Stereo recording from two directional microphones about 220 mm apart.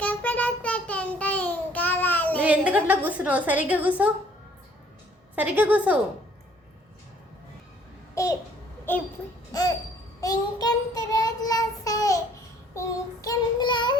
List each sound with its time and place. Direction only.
0.0 s child singing: 5° left (ahead or behind)
2.4 s a woman's voice: 5° right (ahead or behind)
5.3 s a woman's voice: 5° right (ahead or behind)
8.1 s a child's voice: 15° left (ahead or behind)
9.5 s music: 15° left (ahead or behind)
10.2 s child singing: 15° left (ahead or behind)